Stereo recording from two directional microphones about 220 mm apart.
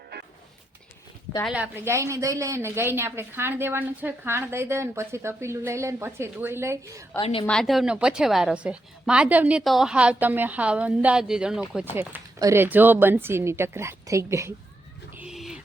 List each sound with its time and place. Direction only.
1.5 s a woman's voice: 5° right (ahead or behind)
7.2 s a woman's voice: 25° left (ahead or behind)
7.4 s a woman's voice: centre (ahead or behind)
11.9 s a woman's voice: 15° right (ahead or behind)
15.1 s bird: 5° right (ahead or behind)